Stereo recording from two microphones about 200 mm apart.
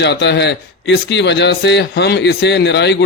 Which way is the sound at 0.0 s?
60° left (ahead or behind).